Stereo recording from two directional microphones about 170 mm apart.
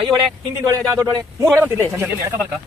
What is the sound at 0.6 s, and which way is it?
A man's voice, 20° right (ahead or behind).